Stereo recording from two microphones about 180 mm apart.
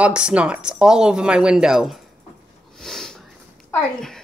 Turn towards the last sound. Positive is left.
turn(degrees=5)  # may be behind; listen again after turning